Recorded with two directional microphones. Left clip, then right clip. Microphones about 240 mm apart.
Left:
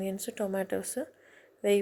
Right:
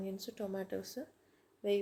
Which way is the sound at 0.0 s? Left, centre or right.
Centre.